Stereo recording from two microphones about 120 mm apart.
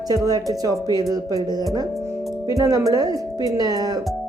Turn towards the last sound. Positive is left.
turn(degrees=-30)  # may be behind; listen again after turning